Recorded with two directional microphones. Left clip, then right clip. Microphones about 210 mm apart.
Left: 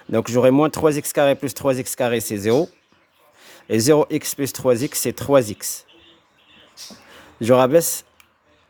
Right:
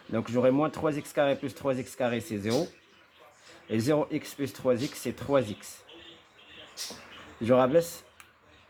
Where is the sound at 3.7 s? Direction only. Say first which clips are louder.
Left 11 dB; 50° left (ahead or behind).